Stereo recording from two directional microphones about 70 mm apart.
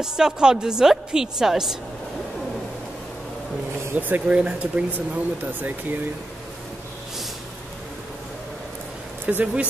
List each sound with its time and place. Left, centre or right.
0.0 s a woman's voice: centre
3.9 s speech: right
4.4 s a woman's voice: centre
9.2 s speech: right